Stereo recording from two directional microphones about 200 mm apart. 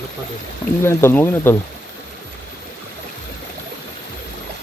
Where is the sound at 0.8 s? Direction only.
10° left (ahead or behind).